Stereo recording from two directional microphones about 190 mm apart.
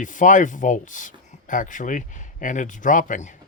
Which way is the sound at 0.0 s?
40° left (ahead or behind).